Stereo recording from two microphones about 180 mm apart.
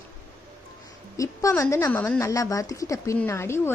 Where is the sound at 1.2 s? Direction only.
15° left (ahead or behind).